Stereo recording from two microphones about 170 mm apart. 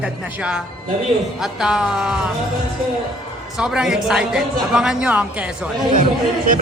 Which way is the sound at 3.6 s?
5° right (ahead or behind).